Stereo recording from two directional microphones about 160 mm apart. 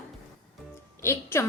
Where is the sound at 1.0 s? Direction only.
15° left (ahead or behind).